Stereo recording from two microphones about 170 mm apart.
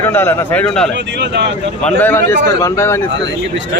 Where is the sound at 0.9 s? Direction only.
90° right.